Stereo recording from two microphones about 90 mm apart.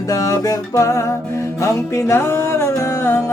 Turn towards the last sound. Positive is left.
turn(degrees=30)  # may be behind; listen again after turning